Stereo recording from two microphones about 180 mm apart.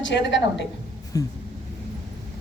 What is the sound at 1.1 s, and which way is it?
Vehicle, 20° left (ahead or behind).